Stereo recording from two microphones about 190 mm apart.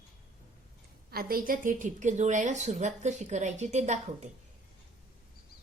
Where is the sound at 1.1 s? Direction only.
50° right (ahead or behind).